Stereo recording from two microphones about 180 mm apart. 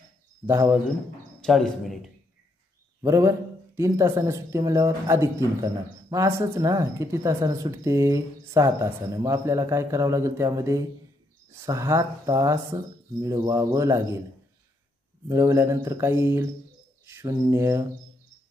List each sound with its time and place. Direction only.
0.5 s speech: 15° right (ahead or behind)
1.4 s speech: centre (ahead or behind)
3.0 s speech: 15° right (ahead or behind)
15.2 s speech: 15° right (ahead or behind)